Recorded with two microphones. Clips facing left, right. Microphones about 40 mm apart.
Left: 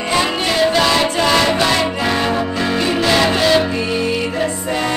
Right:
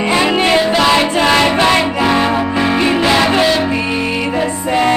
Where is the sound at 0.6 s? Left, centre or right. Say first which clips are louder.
Right 2 dB; centre.